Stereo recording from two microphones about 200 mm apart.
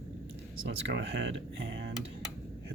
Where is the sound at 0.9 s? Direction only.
60° right (ahead or behind).